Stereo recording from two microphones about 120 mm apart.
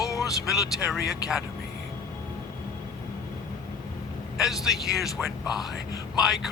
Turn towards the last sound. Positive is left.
turn(degrees=-5)  # may be behind; listen again after turning